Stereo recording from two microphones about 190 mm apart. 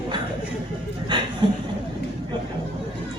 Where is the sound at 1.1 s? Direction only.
25° right (ahead or behind).